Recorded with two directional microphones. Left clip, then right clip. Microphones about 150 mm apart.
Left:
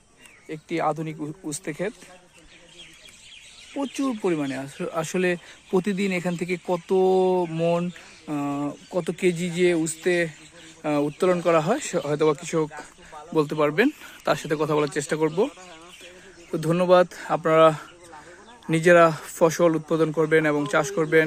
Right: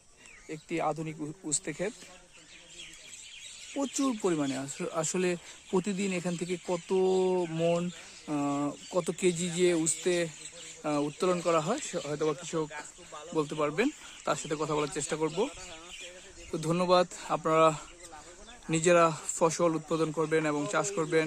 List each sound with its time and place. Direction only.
0.4 s speech: 10° right (ahead or behind)
3.8 s speech: 25° right (ahead or behind); by 11.9 s 15° left (ahead or behind)
11.9 s speech: 25° left (ahead or behind)
16.5 s speech: centre (ahead or behind)